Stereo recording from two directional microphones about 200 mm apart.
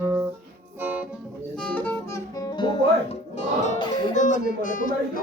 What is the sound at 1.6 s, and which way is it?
Music, 10° left (ahead or behind).